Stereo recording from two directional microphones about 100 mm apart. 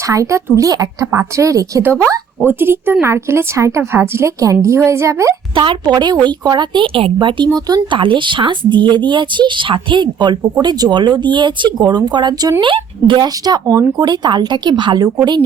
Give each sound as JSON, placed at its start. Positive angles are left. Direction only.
{"t": 0.1, "sound": "speech", "side_deg": -30}
{"t": 2.5, "sound": "a woman's voice", "side_deg": -20}
{"t": 5.5, "sound": "speech", "side_deg": -50}
{"t": 7.9, "sound": "speech", "side_deg": -55}
{"t": 12.6, "sound": "speech", "side_deg": -55}